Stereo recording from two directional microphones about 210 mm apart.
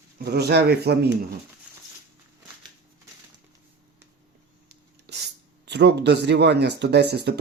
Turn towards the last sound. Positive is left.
turn(degrees=-50)  # may be behind; listen again after turning